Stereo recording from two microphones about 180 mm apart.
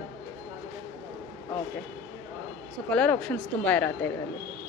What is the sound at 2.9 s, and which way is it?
Speech, 5° left (ahead or behind).